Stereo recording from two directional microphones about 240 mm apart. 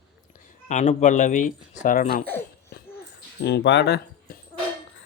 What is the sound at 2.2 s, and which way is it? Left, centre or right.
Laughter, centre.